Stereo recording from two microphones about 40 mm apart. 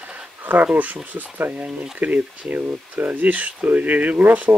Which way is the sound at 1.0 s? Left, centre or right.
Right.